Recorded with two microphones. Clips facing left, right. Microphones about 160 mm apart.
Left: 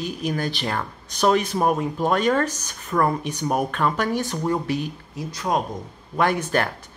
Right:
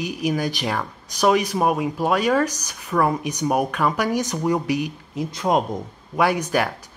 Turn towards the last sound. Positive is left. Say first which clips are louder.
# right 1 dB
turn(degrees=-10)  # may be behind; listen again after turning